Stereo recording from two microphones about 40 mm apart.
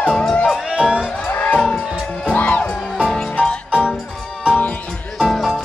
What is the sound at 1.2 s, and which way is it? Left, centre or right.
Music, left.